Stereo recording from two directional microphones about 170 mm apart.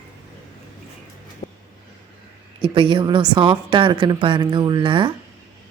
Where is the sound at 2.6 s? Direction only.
30° right (ahead or behind).